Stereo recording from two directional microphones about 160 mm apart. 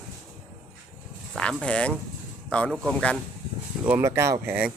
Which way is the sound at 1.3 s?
5° left (ahead or behind).